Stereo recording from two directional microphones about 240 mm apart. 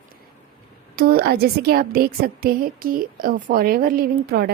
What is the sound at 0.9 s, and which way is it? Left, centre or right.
A woman's voice, right.